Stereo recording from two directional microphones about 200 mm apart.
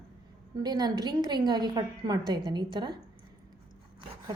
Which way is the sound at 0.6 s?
20° right (ahead or behind).